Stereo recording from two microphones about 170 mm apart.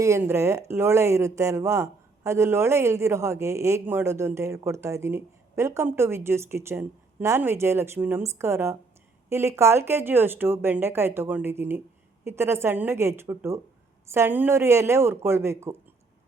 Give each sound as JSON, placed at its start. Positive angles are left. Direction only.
{"t": 0.0, "sound": "speech", "side_deg": -15}